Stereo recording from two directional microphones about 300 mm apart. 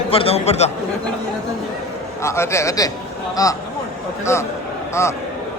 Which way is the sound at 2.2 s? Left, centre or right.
Centre.